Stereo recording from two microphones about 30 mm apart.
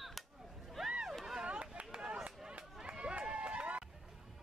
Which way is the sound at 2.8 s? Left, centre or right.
Right.